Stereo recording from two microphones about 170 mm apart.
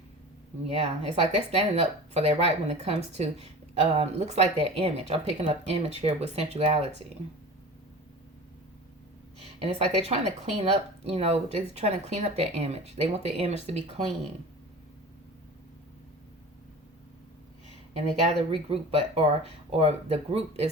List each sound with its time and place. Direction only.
0.7 s speech: 35° right (ahead or behind)
9.6 s speech: 35° right (ahead or behind)
17.9 s speech: 40° right (ahead or behind)